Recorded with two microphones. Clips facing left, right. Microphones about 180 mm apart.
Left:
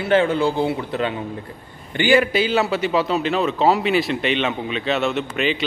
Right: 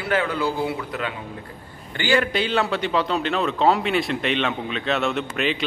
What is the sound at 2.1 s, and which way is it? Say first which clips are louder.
A man's voice: left 3 dB; 5° left (ahead or behind).